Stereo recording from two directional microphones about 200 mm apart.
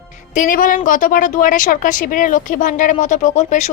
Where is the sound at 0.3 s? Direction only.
40° left (ahead or behind).